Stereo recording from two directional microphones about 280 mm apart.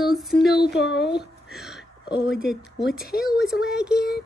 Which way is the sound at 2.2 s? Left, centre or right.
Centre.